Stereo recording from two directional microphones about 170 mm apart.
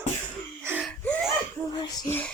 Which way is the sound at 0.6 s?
10° right (ahead or behind).